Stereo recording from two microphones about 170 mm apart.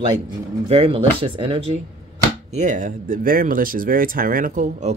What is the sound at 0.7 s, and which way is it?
Speech, 35° right (ahead or behind).